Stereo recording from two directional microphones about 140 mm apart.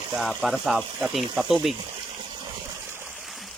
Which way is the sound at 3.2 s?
Centre (ahead or behind).